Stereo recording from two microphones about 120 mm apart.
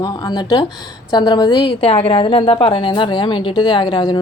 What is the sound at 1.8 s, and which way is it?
A woman's voice, 50° left (ahead or behind).